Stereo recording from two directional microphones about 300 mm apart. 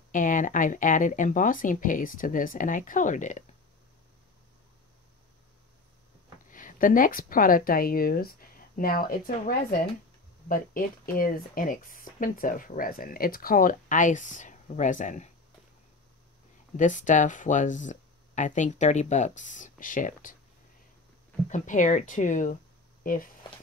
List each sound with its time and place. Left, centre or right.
0.1 s speech: left
6.5 s speech: left
16.7 s speech: left
21.5 s speech: left